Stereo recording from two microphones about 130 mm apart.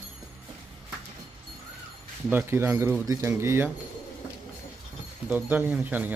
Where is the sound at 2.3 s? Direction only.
15° right (ahead or behind).